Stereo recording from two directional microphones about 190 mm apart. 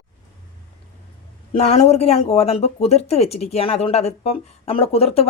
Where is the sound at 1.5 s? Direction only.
35° left (ahead or behind).